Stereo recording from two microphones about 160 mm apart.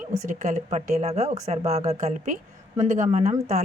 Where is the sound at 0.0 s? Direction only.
50° right (ahead or behind).